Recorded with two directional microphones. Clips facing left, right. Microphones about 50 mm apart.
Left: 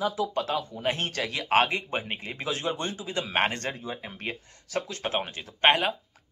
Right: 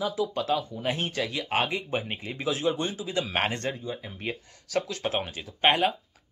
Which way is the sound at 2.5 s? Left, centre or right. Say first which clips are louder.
Right 3 dB; left.